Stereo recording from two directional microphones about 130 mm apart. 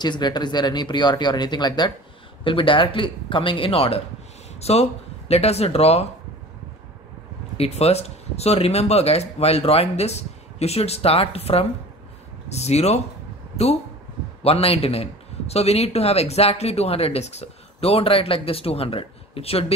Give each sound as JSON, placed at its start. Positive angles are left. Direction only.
{"t": 0.0, "sound": "a man's voice", "side_deg": 35}
{"t": 7.5, "sound": "a man's voice", "side_deg": 50}
{"t": 14.4, "sound": "a man's voice", "side_deg": 50}